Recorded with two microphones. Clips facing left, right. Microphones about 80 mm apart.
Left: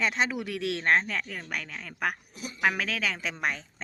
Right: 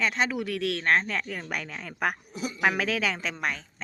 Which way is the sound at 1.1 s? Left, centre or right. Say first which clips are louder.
Right 2 dB; centre.